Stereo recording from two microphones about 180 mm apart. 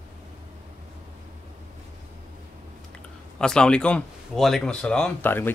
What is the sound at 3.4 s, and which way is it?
Speech, 5° left (ahead or behind).